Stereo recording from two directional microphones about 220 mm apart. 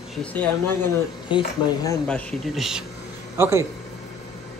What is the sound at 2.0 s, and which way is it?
A man's voice, centre (ahead or behind).